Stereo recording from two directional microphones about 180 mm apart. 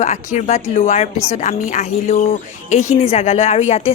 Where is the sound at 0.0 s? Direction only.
40° left (ahead or behind).